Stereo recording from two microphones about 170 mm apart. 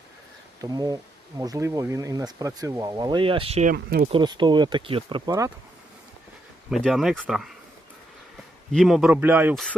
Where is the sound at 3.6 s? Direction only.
60° right (ahead or behind).